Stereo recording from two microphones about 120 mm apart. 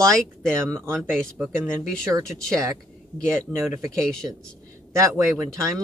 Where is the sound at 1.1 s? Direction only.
15° right (ahead or behind).